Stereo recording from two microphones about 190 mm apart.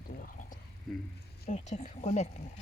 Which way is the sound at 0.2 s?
45° left (ahead or behind).